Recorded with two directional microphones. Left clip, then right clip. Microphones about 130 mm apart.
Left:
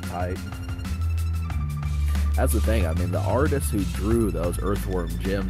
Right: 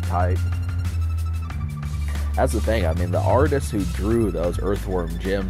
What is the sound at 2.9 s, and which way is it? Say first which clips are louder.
Music: right 6 dB; centre (ahead or behind).